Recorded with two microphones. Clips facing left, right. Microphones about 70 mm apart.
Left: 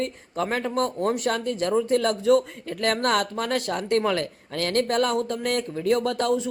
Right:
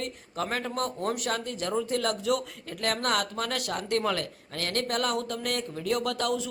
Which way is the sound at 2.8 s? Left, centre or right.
Left.